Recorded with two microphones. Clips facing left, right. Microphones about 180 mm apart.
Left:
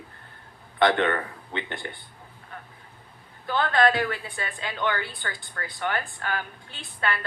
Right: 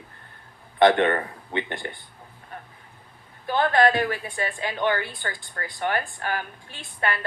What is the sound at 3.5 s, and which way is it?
Speech, 20° right (ahead or behind).